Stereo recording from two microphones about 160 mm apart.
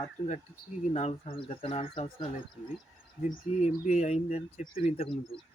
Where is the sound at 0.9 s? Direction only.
45° left (ahead or behind).